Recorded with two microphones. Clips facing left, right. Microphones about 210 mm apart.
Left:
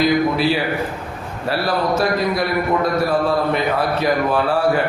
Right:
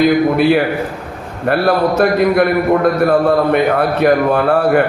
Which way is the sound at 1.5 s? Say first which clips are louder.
Right 6 dB; 60° right (ahead or behind).